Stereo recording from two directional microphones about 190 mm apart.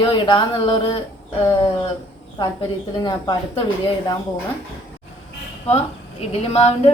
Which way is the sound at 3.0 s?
25° left (ahead or behind).